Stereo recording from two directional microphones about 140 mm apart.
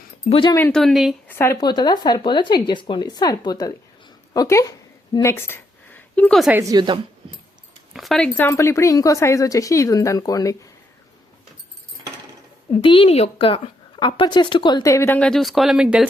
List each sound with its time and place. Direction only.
0.3 s a woman's voice: 40° left (ahead or behind)
0.7 s speech: 5° left (ahead or behind)
1.3 s speech: 15° left (ahead or behind)
1.6 s a woman's voice: 30° left (ahead or behind)
5.2 s a sound: 15° left (ahead or behind)
6.5 s a woman's voice: 20° right (ahead or behind)
7.9 s speech: centre (ahead or behind)
8.4 s speech: 15° left (ahead or behind)
12.7 s a woman's voice: 40° left (ahead or behind); by 15.3 s 15° left (ahead or behind)
15.3 s speech: centre (ahead or behind)